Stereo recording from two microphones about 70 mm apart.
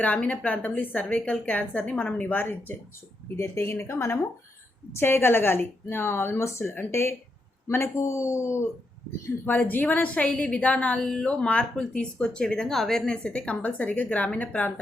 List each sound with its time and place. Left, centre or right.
0.0 s a woman's voice: left
9.5 s a woman's voice: left